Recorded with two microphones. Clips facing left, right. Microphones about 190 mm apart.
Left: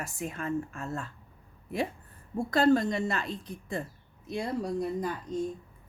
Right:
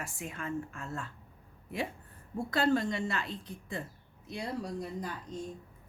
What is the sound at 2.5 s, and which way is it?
A woman's voice, 40° left (ahead or behind).